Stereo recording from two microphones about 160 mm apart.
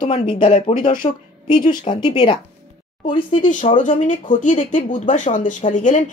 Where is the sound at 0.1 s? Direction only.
30° left (ahead or behind).